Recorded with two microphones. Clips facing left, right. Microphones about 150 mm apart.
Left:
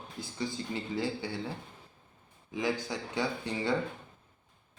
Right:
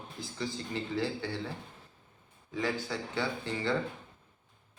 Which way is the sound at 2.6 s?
15° left (ahead or behind).